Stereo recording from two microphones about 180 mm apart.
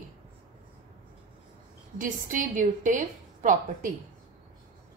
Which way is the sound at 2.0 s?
45° right (ahead or behind).